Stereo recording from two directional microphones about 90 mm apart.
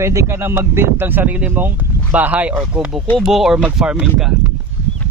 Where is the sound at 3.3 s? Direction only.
5° right (ahead or behind).